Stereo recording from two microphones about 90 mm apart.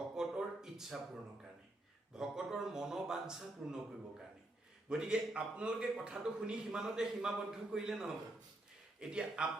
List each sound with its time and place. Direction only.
0.2 s a sound: 5° right (ahead or behind)
2.1 s a man's voice: 5° right (ahead or behind)
4.9 s a man's voice: 10° right (ahead or behind)